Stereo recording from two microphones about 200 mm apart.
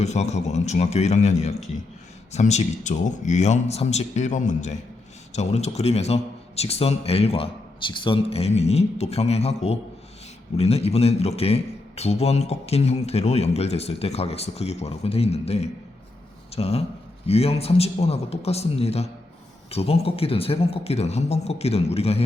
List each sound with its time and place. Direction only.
0.0 s a man's voice: 35° left (ahead or behind)